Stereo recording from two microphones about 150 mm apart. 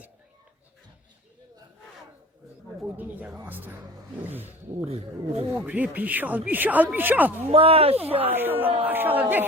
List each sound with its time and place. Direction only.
2.8 s a sound: 10° right (ahead or behind)
3.3 s speech: 15° right (ahead or behind)
4.9 s speech: 45° right (ahead or behind)
5.5 s speech: 10° right (ahead or behind)
7.5 s speech: 40° right (ahead or behind)
8.3 s speech: 15° right (ahead or behind)